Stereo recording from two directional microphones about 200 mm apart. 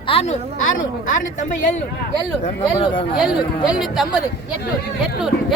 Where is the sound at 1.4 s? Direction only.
40° left (ahead or behind).